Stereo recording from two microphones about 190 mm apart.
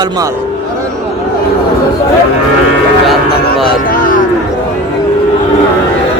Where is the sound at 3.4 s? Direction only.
45° left (ahead or behind).